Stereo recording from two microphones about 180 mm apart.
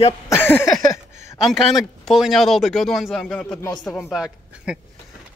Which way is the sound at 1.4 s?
Centre (ahead or behind).